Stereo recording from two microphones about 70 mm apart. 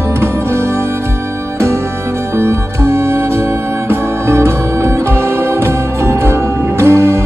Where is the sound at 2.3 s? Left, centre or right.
Right.